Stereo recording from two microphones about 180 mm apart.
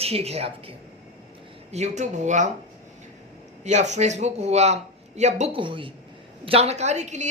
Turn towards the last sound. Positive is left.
turn(degrees=-40)  # may be behind; listen again after turning